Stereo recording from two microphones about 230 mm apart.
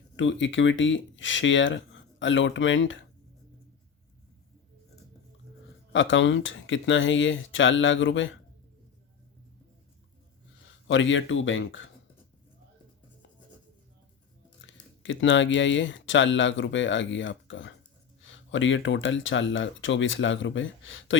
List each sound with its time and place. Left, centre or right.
0.2 s speech: left
5.9 s speech: left
10.8 s speech: left
14.6 s speech: left